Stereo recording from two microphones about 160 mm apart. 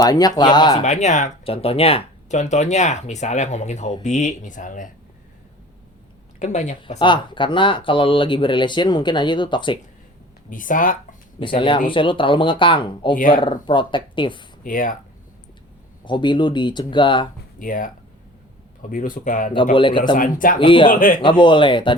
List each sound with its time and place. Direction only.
0.0 s speech: 25° left (ahead or behind)
0.8 s speech: 45° left (ahead or behind)
6.4 s speech: 45° left (ahead or behind)
7.0 s speech: 30° left (ahead or behind)
10.5 s speech: 55° left (ahead or behind)
11.3 s speech: 30° left (ahead or behind)
14.6 s speech: 55° left (ahead or behind)
16.0 s speech: 30° left (ahead or behind)
17.6 s speech: 55° left (ahead or behind)
19.7 s speech: 30° left (ahead or behind)
20.1 s speech: 60° left (ahead or behind)
20.6 s speech: 30° left (ahead or behind)
20.9 s speech: 60° left (ahead or behind)
21.2 s speech: 30° left (ahead or behind)